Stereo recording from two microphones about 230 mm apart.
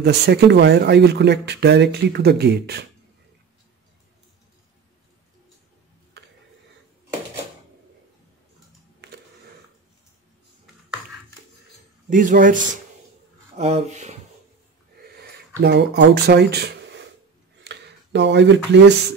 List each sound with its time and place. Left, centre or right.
0.0 s speech: right
6.2 s a sound: right
12.1 s a man's voice: right
15.1 s speech: right